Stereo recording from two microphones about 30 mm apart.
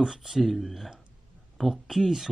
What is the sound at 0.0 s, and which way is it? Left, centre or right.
Speech, centre.